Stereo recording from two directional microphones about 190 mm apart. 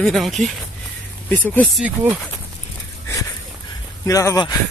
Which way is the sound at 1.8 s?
10° right (ahead or behind).